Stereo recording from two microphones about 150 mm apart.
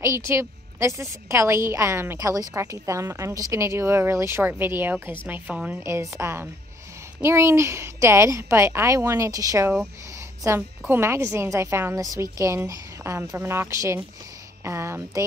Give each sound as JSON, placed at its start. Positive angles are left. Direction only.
{"t": 0.0, "sound": "a woman's voice", "side_deg": -20}
{"t": 10.8, "sound": "a woman's voice", "side_deg": -15}